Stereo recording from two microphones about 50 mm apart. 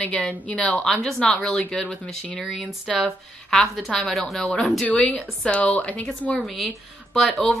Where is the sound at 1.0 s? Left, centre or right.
Centre.